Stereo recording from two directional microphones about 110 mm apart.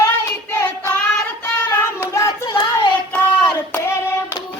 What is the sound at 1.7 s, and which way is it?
Hands, 25° left (ahead or behind).